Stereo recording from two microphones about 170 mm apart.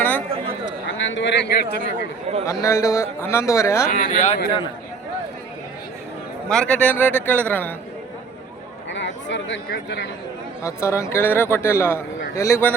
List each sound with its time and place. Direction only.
0.6 s speech: 90° left
2.4 s a man's voice: 15° left (ahead or behind)
3.9 s speech: 45° left (ahead or behind)
6.5 s a man's voice: 5° left (ahead or behind)
8.9 s speech: 90° left
10.6 s a man's voice: 15° left (ahead or behind)